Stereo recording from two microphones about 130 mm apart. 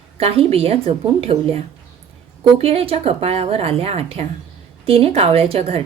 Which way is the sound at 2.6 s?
50° right (ahead or behind).